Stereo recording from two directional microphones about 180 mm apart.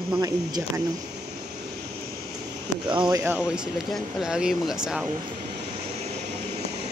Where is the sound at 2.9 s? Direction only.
20° right (ahead or behind).